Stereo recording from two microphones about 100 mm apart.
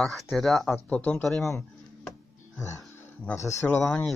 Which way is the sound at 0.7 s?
15° left (ahead or behind).